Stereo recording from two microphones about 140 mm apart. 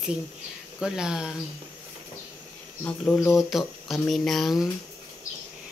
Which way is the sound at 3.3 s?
Centre (ahead or behind).